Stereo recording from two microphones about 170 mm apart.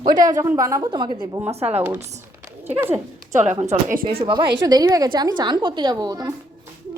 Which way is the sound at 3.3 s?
45° right (ahead or behind).